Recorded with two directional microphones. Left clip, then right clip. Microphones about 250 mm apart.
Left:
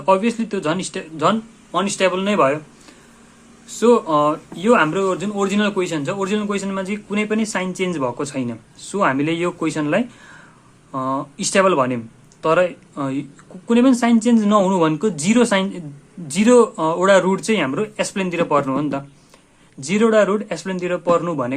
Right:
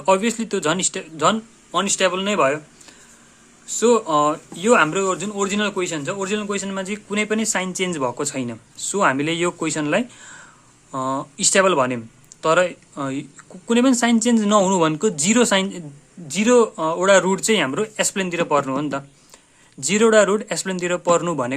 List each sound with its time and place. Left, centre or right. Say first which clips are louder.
0.0 s speech: left 1 dB; centre
3.7 s speech: left 2 dB; centre